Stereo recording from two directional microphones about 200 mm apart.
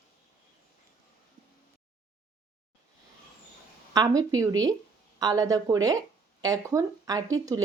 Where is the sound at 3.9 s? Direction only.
20° right (ahead or behind).